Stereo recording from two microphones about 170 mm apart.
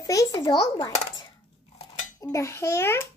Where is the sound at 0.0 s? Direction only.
20° left (ahead or behind).